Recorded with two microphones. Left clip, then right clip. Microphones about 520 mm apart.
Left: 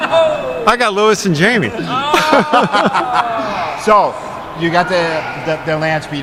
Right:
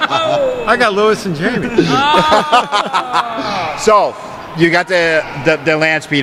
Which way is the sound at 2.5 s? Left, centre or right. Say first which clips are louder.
Even; right.